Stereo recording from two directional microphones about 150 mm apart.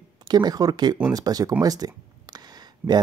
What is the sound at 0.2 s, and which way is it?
Speech, 30° right (ahead or behind).